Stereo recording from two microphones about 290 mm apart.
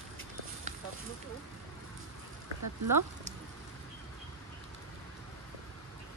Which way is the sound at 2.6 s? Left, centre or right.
Right.